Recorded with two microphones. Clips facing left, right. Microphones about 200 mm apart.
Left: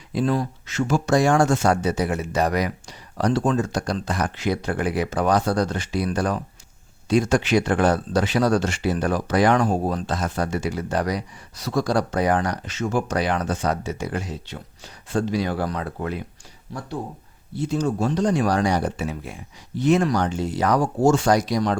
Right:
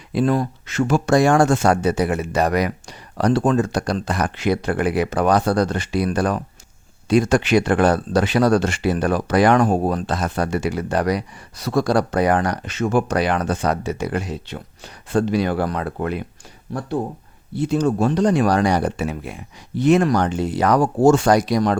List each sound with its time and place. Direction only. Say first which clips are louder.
0.1 s speech: right 3 dB; 60° right (ahead or behind)